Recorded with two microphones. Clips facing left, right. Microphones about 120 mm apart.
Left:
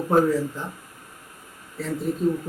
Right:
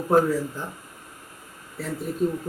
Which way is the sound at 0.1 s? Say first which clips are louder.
Even; centre (ahead or behind).